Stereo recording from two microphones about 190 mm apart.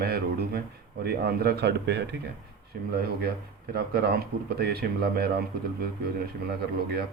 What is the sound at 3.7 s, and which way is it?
Speech, 55° right (ahead or behind).